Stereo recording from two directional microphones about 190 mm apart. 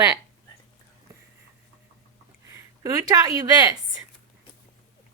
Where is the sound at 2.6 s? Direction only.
15° right (ahead or behind).